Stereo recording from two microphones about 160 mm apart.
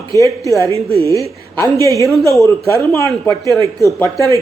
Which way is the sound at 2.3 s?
20° left (ahead or behind).